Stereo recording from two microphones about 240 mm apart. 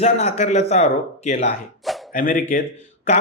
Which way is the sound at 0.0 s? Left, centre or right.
Left.